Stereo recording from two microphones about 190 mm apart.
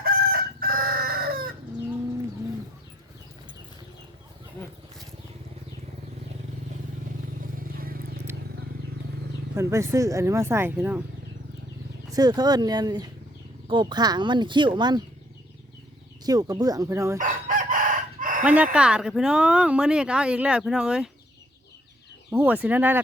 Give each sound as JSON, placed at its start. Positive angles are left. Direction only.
{"t": 0.0, "sound": "chicken", "side_deg": -50}
{"t": 7.4, "sound": "a sound", "side_deg": -50}
{"t": 9.6, "sound": "speech", "side_deg": -15}
{"t": 12.1, "sound": "speech", "side_deg": -20}
{"t": 16.2, "sound": "speech", "side_deg": -20}
{"t": 17.2, "sound": "chicken", "side_deg": -45}
{"t": 18.4, "sound": "speech", "side_deg": -5}
{"t": 22.3, "sound": "speech", "side_deg": -10}